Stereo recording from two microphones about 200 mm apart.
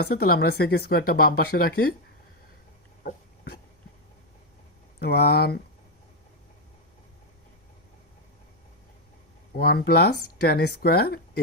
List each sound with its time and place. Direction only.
0.0 s speech: 50° left (ahead or behind)
3.0 s dog: 50° left (ahead or behind)
4.9 s speech: 55° left (ahead or behind)
9.6 s speech: 50° left (ahead or behind)